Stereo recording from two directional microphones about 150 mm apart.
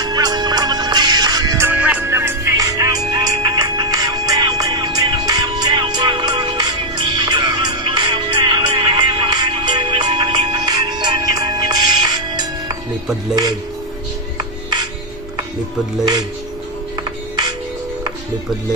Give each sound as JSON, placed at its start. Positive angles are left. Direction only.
{"t": 0.0, "sound": "music", "side_deg": -25}
{"t": 1.7, "sound": "music", "side_deg": -10}